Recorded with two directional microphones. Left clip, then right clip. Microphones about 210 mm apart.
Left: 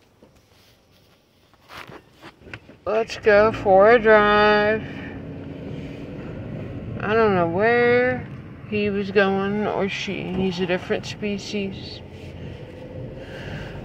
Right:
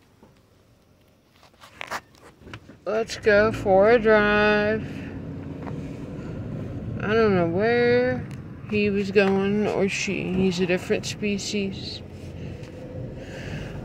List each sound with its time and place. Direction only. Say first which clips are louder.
2.9 s speech: left 3 dB; 15° right (ahead or behind)
7.0 s speech: left 2 dB; 25° right (ahead or behind)
13.2 s a sound: left 2 dB; 25° right (ahead or behind)